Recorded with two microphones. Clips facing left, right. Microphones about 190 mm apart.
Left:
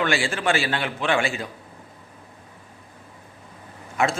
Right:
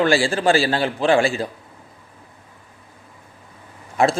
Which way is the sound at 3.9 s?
35° right (ahead or behind).